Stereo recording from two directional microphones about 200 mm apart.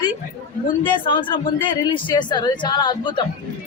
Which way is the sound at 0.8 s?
25° left (ahead or behind).